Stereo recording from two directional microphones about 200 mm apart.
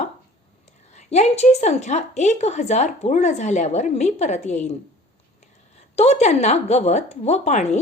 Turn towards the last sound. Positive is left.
turn(degrees=35)  # may be behind; listen again after turning